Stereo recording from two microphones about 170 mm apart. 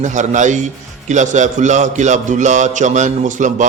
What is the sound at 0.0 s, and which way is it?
A man's voice, 45° right (ahead or behind).